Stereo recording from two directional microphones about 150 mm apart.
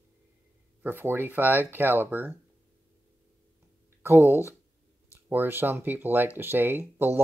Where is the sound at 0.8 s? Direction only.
15° right (ahead or behind).